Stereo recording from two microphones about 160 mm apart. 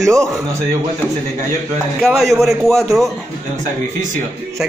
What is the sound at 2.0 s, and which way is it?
Speech, centre (ahead or behind).